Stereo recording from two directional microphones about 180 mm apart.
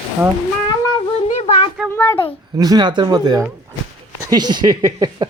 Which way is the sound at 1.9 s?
10° left (ahead or behind).